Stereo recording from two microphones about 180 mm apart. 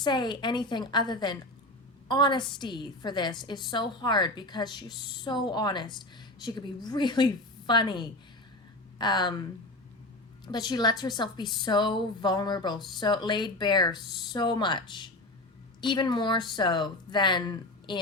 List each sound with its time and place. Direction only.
0.0 s a woman's voice: 25° left (ahead or behind)
10.4 s a woman's voice: 25° left (ahead or behind)